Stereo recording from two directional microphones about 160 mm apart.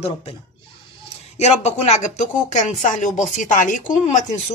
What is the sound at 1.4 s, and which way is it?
Speech, 45° left (ahead or behind).